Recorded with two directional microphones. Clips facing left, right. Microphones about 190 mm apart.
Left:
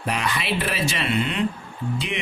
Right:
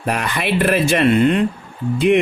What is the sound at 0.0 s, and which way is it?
Speech, 55° right (ahead or behind).